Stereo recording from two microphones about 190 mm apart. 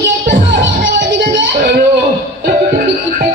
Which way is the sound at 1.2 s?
60° right (ahead or behind).